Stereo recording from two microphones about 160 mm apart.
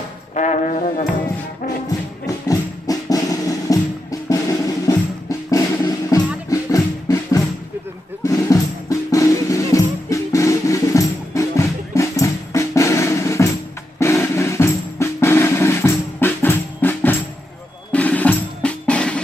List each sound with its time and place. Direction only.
0.3 s brass instrument: 50° left (ahead or behind)
2.2 s music: 20° left (ahead or behind)
6.0 s music: 20° left (ahead or behind)
13.9 s percussion: 15° left (ahead or behind)
17.9 s music: 10° left (ahead or behind)